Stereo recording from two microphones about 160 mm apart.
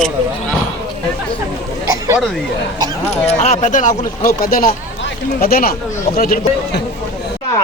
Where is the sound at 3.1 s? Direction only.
45° left (ahead or behind); by 6.8 s 65° left (ahead or behind).